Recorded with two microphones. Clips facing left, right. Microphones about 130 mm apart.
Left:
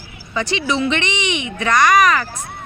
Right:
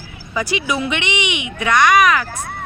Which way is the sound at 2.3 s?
70° right (ahead or behind).